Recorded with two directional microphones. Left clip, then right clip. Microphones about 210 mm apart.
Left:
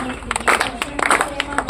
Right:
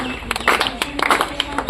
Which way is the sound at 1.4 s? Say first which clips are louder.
Right 1 dB; 15° right (ahead or behind).